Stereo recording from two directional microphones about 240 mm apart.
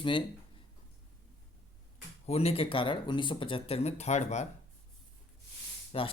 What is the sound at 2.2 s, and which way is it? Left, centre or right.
Speech, left.